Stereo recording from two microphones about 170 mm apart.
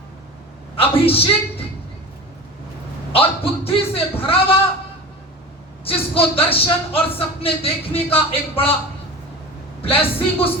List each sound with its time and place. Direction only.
0.8 s speech: 35° left (ahead or behind)
3.1 s speech: 35° left (ahead or behind)
5.8 s speech: 35° left (ahead or behind)
9.8 s speech: 35° left (ahead or behind)